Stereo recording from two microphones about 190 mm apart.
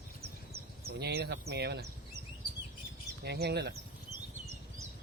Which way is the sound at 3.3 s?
60° right (ahead or behind).